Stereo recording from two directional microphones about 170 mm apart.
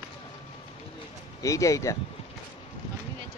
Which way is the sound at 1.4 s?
20° left (ahead or behind).